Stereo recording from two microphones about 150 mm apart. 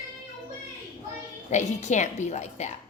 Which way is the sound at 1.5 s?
50° left (ahead or behind).